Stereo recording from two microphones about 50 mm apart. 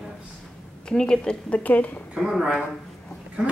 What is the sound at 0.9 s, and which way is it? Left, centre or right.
A woman's voice, centre.